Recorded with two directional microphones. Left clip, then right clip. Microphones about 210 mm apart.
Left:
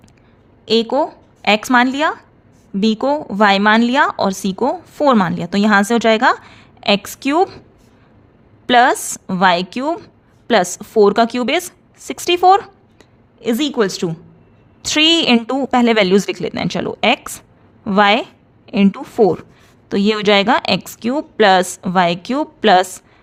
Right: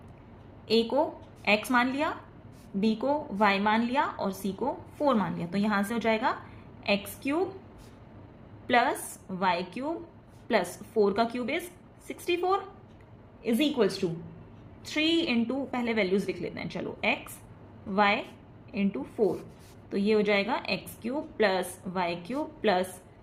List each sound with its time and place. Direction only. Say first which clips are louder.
0.6 s a woman's voice: left 10 dB; 55° left (ahead or behind)
8.6 s a woman's voice: left 14 dB; 55° left (ahead or behind)